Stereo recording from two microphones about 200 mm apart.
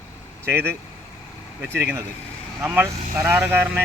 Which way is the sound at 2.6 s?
10° right (ahead or behind).